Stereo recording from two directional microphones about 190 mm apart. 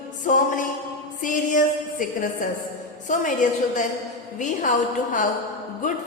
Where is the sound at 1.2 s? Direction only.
45° left (ahead or behind).